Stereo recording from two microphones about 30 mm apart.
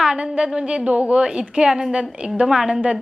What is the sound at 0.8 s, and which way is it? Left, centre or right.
Speech, right.